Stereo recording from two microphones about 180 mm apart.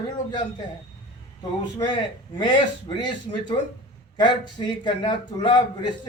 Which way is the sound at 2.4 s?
25° left (ahead or behind).